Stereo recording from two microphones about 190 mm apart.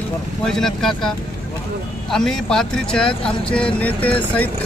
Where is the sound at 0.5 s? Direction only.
Centre (ahead or behind).